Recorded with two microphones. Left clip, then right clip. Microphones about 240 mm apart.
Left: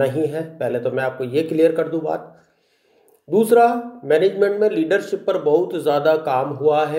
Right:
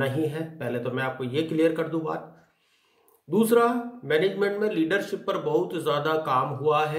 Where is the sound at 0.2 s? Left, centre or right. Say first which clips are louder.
Left 7 dB; centre.